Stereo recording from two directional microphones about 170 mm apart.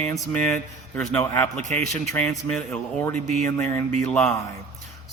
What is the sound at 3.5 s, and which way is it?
Speech, 15° left (ahead or behind).